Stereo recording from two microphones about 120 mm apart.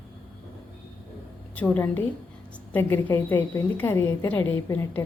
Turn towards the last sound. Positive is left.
turn(degrees=20)  # may be behind; listen again after turning